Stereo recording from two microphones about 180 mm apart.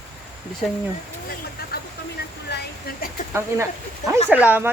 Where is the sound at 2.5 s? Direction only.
65° left (ahead or behind).